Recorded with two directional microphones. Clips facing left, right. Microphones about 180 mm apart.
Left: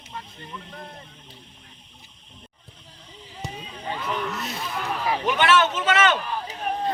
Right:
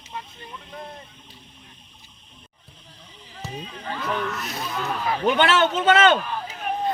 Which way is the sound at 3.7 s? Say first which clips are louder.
Right 1 dB; 20° left (ahead or behind).